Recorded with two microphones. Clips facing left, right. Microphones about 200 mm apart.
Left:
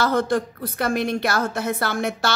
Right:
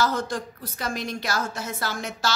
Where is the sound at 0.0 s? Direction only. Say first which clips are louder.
Left 5 dB; 60° left (ahead or behind).